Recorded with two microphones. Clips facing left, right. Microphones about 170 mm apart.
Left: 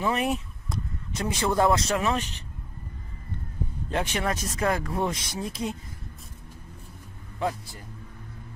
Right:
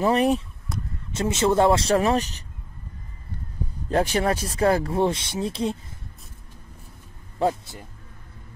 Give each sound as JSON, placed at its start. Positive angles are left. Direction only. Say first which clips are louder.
{"t": 0.0, "sound": "speech", "louder": "right 6 dB", "side_deg": -35}
{"t": 1.1, "sound": "speech", "louder": "right 5 dB", "side_deg": -25}
{"t": 3.9, "sound": "speech", "louder": "right 6 dB", "side_deg": -35}
{"t": 7.3, "sound": "speech", "louder": "right 6 dB", "side_deg": -25}